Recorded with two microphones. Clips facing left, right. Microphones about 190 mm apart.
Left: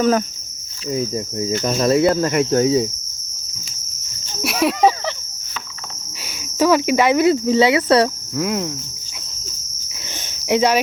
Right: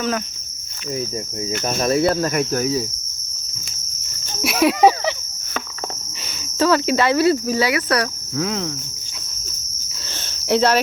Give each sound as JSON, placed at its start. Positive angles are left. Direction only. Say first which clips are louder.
{"t": 0.9, "sound": "cricket", "louder": "left 4 dB", "side_deg": 30}
{"t": 4.4, "sound": "cricket", "louder": "right 1 dB", "side_deg": 0}
{"t": 4.8, "sound": "cricket", "louder": "right 2 dB", "side_deg": -10}
{"t": 6.6, "sound": "cricket", "louder": "left 2 dB", "side_deg": 15}
{"t": 8.4, "sound": "cricket", "louder": "left 2 dB", "side_deg": 10}
{"t": 10.2, "sound": "cricket", "louder": "left 1 dB", "side_deg": 10}